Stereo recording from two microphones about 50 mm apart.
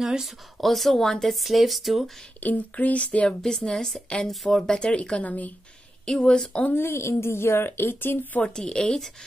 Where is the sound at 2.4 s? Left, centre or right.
Left.